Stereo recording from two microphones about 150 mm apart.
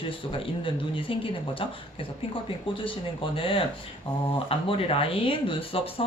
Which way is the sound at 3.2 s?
35° left (ahead or behind).